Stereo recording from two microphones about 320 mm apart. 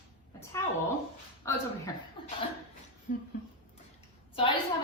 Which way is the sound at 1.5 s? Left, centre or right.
Centre.